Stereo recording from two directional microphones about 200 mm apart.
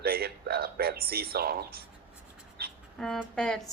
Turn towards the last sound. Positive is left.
turn(degrees=5)  # may be behind; listen again after turning